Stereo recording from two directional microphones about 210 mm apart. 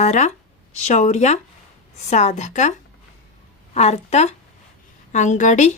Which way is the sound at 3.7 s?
30° left (ahead or behind).